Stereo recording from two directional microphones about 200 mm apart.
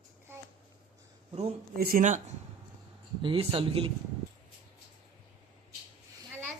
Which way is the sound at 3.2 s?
25° right (ahead or behind).